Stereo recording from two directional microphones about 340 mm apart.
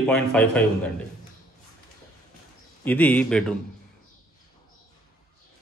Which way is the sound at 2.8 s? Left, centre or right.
Centre.